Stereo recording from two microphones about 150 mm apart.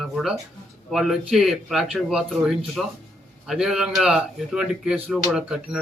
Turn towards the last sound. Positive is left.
turn(degrees=-5)  # may be behind; listen again after turning